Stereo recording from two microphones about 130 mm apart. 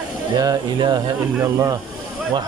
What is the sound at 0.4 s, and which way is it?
Speech, 30° right (ahead or behind).